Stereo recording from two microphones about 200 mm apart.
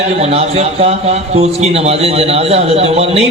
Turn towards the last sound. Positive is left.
turn(degrees=-30)  # may be behind; listen again after turning